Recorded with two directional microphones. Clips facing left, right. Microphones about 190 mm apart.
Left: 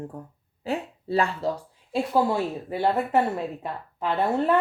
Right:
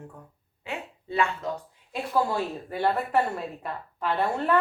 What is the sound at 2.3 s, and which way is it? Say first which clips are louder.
Speech: left 3 dB; 20° left (ahead or behind).